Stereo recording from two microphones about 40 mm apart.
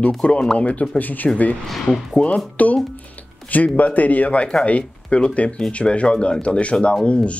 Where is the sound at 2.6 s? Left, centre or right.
Left.